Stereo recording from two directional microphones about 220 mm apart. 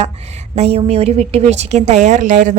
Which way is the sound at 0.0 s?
30° right (ahead or behind).